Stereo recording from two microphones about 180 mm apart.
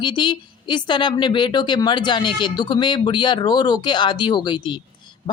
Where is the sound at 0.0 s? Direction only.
25° left (ahead or behind).